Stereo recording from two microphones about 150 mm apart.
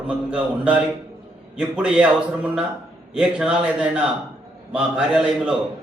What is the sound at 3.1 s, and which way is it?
A man's voice, 5° right (ahead or behind).